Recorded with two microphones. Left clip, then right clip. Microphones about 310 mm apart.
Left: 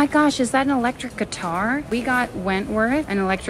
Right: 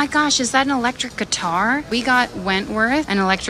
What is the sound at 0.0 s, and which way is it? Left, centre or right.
A woman's voice, centre.